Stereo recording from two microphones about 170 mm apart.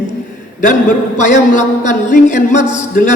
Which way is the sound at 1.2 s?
45° left (ahead or behind).